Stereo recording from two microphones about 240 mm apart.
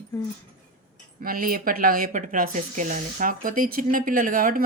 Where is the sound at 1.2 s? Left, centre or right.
Right.